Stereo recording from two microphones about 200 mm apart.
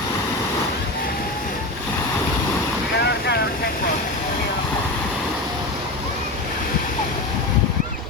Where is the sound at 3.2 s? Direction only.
55° left (ahead or behind).